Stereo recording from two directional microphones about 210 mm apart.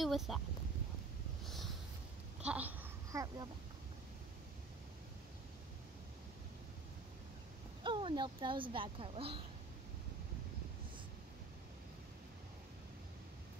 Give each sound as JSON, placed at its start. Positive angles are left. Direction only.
{"t": 0.0, "sound": "speech", "side_deg": 0}
{"t": 1.4, "sound": "a sound", "side_deg": 0}
{"t": 7.8, "sound": "speech", "side_deg": -25}